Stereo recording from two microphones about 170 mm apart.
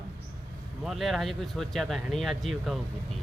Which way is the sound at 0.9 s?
Centre (ahead or behind).